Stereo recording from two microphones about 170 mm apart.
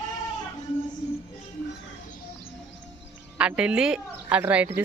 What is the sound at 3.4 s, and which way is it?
Speech, 5° right (ahead or behind).